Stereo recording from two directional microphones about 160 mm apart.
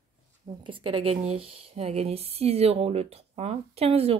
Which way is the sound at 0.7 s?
35° right (ahead or behind).